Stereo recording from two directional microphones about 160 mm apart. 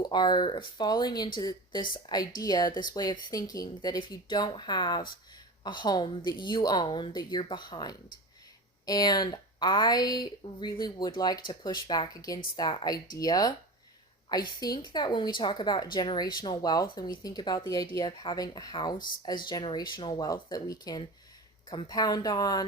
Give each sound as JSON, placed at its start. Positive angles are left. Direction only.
{"t": 0.0, "sound": "speech", "side_deg": 25}
{"t": 18.9, "sound": "speech", "side_deg": 60}
{"t": 19.5, "sound": "speech", "side_deg": 25}